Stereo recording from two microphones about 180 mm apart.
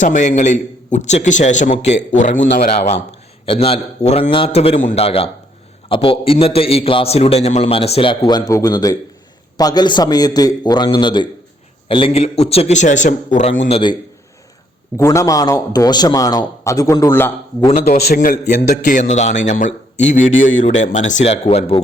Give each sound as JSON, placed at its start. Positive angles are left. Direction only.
{"t": 0.0, "sound": "a man's voice", "side_deg": 45}
{"t": 3.4, "sound": "a man's voice", "side_deg": 30}
{"t": 13.7, "sound": "a man's voice", "side_deg": 30}
{"t": 14.9, "sound": "a man's voice", "side_deg": 15}
{"t": 17.8, "sound": "a man's voice", "side_deg": 55}